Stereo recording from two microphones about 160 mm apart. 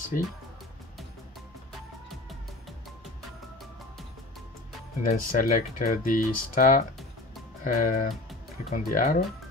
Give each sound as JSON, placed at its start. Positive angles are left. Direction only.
{"t": 0.1, "sound": "speech", "side_deg": 55}
{"t": 1.7, "sound": "music", "side_deg": 0}
{"t": 5.0, "sound": "speech", "side_deg": 60}